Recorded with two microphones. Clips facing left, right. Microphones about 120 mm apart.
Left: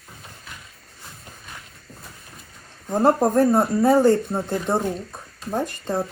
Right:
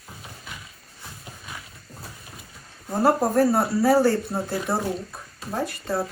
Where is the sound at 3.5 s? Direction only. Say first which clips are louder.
Left 2 dB; 20° left (ahead or behind).